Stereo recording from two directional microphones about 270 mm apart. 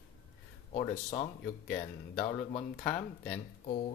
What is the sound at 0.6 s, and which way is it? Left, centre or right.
Speech, left.